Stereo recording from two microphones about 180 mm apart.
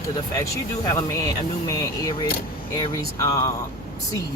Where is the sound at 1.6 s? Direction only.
20° left (ahead or behind).